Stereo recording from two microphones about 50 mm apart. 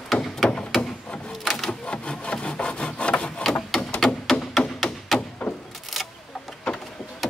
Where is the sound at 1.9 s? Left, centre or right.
Left.